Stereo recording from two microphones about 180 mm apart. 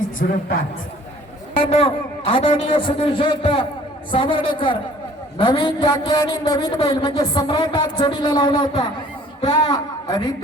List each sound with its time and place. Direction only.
0.2 s a woman's voice: 55° left (ahead or behind)
1.5 s a man's voice: 30° left (ahead or behind)